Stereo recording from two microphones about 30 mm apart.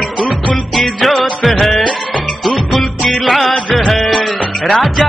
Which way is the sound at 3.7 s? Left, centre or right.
Centre.